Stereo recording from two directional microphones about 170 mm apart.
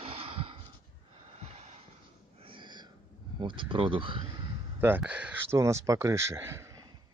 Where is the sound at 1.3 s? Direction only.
40° right (ahead or behind).